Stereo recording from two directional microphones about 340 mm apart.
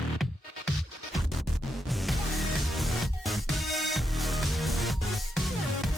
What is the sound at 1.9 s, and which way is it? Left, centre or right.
Music, centre.